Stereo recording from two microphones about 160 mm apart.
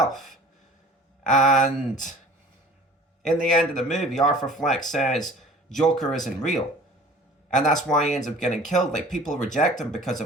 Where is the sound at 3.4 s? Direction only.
Centre (ahead or behind).